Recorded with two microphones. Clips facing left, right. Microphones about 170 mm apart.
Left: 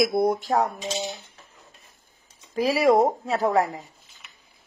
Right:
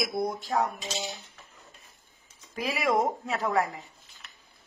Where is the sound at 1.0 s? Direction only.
20° left (ahead or behind).